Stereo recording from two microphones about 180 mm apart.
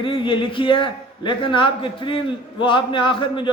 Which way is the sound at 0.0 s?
30° left (ahead or behind).